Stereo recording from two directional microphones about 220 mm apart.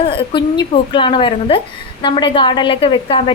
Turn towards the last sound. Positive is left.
turn(degrees=25)  # may be behind; listen again after turning